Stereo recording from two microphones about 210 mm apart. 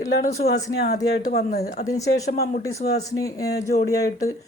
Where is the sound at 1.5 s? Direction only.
50° left (ahead or behind).